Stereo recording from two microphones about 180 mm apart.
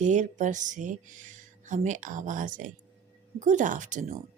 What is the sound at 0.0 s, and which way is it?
A woman's voice, 40° right (ahead or behind).